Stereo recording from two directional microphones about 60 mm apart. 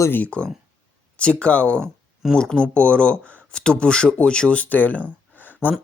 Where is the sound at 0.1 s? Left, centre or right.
Left.